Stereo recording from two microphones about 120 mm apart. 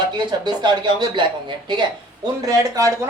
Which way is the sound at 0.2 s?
35° right (ahead or behind).